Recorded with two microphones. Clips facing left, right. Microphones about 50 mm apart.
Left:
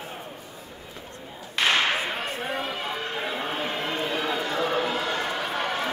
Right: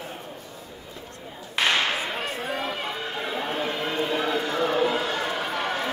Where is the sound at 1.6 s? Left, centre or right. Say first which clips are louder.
Even; centre.